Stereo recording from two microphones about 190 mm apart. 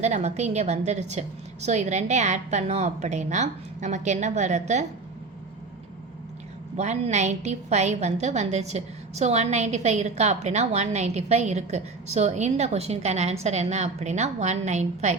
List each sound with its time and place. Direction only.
0.0 s a woman's voice: 35° right (ahead or behind)
6.7 s a woman's voice: 35° right (ahead or behind)